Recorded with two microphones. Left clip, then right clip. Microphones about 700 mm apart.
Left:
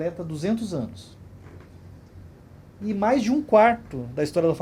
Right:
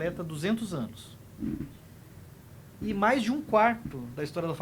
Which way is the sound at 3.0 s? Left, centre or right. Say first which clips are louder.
Left 4 dB; centre.